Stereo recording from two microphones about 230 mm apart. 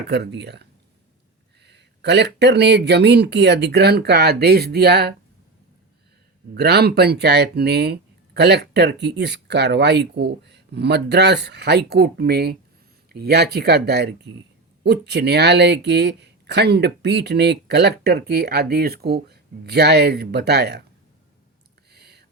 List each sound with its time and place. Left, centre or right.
0.1 s speech: right
6.5 s speech: right
21.9 s a sound: right